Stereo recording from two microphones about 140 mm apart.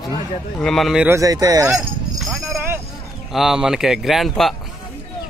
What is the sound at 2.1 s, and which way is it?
Clip-clop, centre (ahead or behind).